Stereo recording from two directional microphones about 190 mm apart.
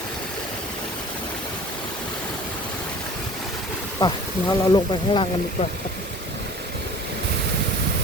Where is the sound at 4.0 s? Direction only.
20° left (ahead or behind).